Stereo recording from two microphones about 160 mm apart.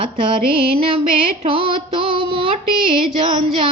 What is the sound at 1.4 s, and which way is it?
Female singing, 35° right (ahead or behind).